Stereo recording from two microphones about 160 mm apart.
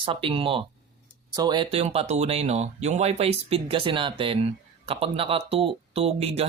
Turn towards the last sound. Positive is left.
turn(degrees=-40)  # may be behind; listen again after turning